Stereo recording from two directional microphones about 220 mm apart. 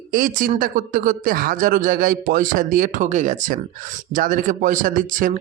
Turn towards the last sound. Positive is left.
turn(degrees=-35)  # may be behind; listen again after turning